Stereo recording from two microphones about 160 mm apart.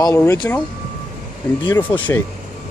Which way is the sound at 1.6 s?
30° left (ahead or behind).